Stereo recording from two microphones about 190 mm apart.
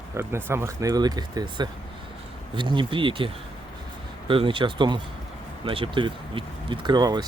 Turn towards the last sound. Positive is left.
turn(degrees=-20)  # may be behind; listen again after turning